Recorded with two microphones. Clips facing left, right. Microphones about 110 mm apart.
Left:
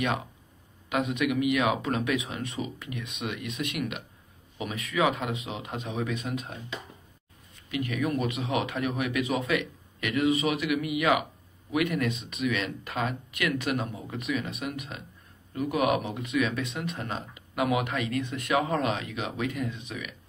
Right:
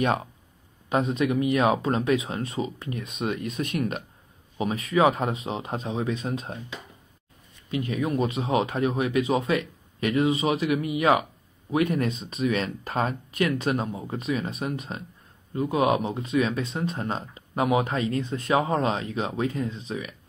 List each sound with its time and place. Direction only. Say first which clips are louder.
0.8 s speech: right 3 dB; 35° right (ahead or behind)
7.7 s speech: right 2 dB; 30° right (ahead or behind)